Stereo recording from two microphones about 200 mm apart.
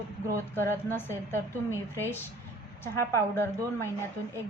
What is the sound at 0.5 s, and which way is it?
Speech, 10° left (ahead or behind).